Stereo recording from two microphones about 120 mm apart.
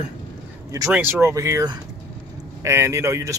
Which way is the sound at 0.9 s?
20° right (ahead or behind).